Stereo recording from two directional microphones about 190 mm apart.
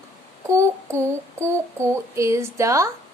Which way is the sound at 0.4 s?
15° right (ahead or behind).